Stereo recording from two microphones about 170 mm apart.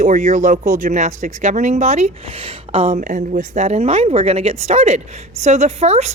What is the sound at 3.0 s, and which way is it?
Speech, 50° right (ahead or behind).